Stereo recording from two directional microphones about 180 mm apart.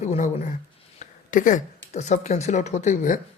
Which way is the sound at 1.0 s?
45° left (ahead or behind).